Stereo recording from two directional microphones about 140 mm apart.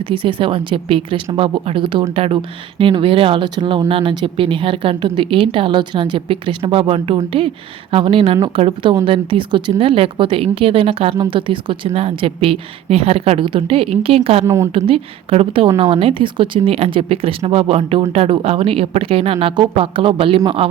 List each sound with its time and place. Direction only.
0.1 s speech: 35° right (ahead or behind)
14.4 s a woman's voice: 20° right (ahead or behind)
14.7 s speech: 40° right (ahead or behind)